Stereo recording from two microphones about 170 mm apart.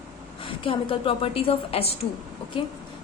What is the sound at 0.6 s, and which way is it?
A woman's voice, 30° left (ahead or behind).